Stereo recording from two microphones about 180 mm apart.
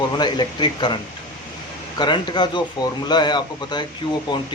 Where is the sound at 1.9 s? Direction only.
25° left (ahead or behind).